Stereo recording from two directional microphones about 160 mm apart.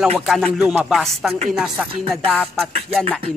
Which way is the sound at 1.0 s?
Centre (ahead or behind).